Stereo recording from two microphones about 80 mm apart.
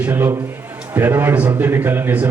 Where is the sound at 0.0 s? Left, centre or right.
Right.